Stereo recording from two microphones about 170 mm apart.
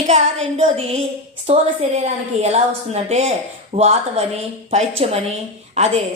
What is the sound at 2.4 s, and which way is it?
A woman's voice, 40° right (ahead or behind).